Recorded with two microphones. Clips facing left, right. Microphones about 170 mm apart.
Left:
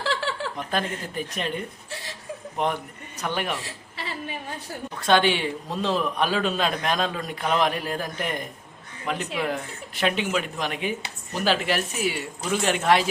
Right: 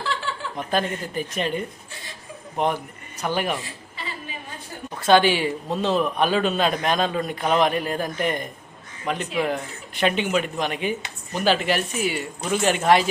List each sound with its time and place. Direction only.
0.0 s a sound: 90° left
0.5 s speech: centre (ahead or behind)
4.9 s speech: 5° right (ahead or behind)